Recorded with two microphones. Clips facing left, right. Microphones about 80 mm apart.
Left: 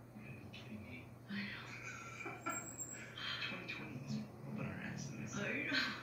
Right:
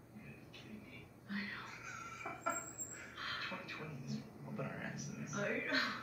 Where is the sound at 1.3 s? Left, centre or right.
Right.